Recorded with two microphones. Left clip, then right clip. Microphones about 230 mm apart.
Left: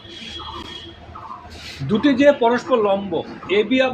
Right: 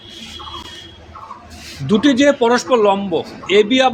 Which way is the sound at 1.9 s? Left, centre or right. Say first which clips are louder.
Right 2 dB; right.